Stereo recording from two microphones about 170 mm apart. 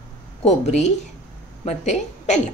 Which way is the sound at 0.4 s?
40° left (ahead or behind).